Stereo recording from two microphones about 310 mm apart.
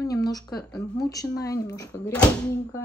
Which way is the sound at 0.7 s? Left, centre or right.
Centre.